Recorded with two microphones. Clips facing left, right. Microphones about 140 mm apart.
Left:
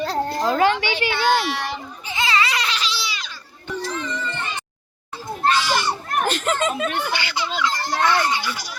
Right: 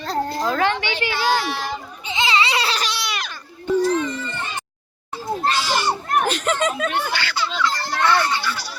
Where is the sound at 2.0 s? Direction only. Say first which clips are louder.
Right 1 dB; 25° right (ahead or behind).